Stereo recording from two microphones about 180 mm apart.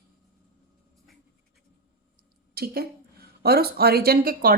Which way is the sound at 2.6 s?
60° right (ahead or behind).